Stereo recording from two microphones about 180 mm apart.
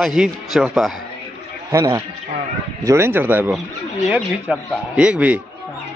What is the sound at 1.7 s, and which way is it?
A man's voice, 15° right (ahead or behind).